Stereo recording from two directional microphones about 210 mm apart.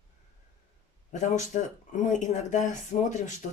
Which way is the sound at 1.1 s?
35° left (ahead or behind).